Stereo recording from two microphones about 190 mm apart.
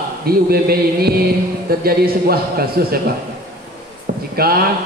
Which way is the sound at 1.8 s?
55° right (ahead or behind).